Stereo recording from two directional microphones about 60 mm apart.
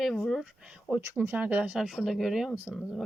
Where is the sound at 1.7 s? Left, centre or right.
Centre.